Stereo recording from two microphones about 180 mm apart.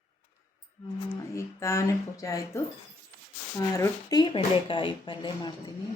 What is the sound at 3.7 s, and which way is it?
Speech, 20° left (ahead or behind).